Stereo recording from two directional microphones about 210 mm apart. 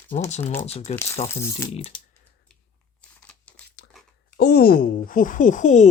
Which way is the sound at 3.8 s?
55° left (ahead or behind).